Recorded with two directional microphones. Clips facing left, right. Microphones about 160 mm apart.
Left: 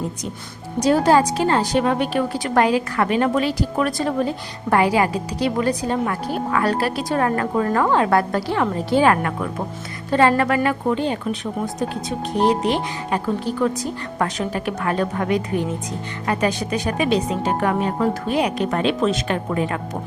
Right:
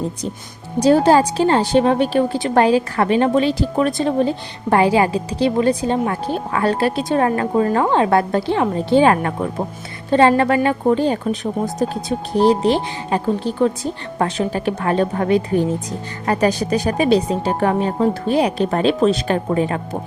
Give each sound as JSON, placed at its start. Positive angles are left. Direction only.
{"t": 0.8, "sound": "a woman's voice", "side_deg": -30}